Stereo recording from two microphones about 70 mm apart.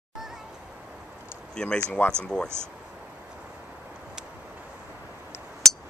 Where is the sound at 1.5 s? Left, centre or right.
Centre.